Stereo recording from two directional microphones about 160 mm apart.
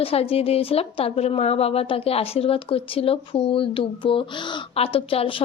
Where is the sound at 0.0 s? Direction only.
35° left (ahead or behind).